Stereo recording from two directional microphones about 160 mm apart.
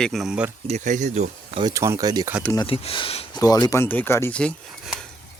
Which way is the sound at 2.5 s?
35° left (ahead or behind).